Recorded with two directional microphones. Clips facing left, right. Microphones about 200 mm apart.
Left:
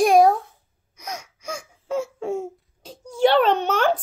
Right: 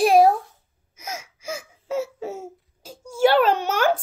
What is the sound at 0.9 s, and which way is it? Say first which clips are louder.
Laughter: even; 5° right (ahead or behind).